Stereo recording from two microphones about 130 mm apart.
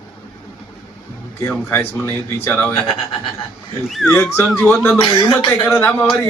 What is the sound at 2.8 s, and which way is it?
Speech, 45° left (ahead or behind).